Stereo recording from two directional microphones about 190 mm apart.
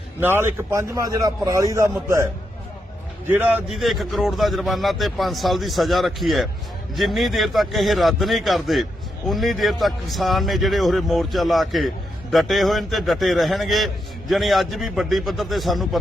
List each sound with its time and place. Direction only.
0.2 s a man's voice: 10° right (ahead or behind)
3.2 s a man's voice: 10° right (ahead or behind)